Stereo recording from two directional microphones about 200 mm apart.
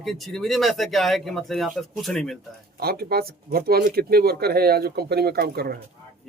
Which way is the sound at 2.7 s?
50° right (ahead or behind).